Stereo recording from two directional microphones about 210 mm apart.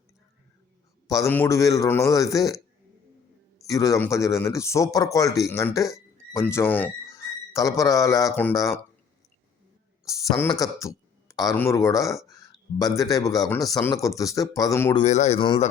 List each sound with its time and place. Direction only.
1.0 s a man's voice: 15° left (ahead or behind)
3.7 s a man's voice: 15° left (ahead or behind)
10.1 s speech: 15° left (ahead or behind)
12.3 s a sound: 15° left (ahead or behind)
13.0 s a man's voice: 15° left (ahead or behind)
14.9 s speech: 35° left (ahead or behind)